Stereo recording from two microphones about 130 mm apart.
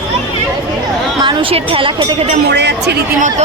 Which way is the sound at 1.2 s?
40° right (ahead or behind).